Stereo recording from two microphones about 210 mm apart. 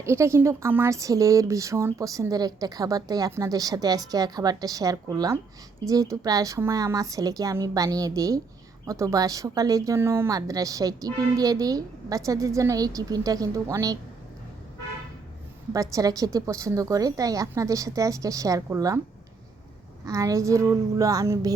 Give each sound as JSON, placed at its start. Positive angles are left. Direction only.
{"t": 0.0, "sound": "speech", "side_deg": -10}
{"t": 15.7, "sound": "speech", "side_deg": -15}
{"t": 20.1, "sound": "speech", "side_deg": -15}